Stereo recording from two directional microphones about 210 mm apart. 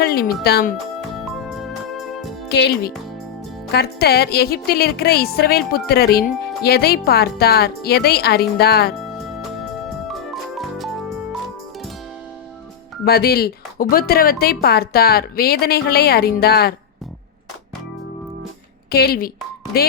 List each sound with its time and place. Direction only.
0.0 s music: 50° left (ahead or behind)
0.4 s speech: 50° left (ahead or behind)
1.1 s organ: centre (ahead or behind)
2.5 s speech: 50° left (ahead or behind)
9.0 s music: centre (ahead or behind)
13.1 s speech: 50° left (ahead or behind)
18.9 s speech: 45° left (ahead or behind)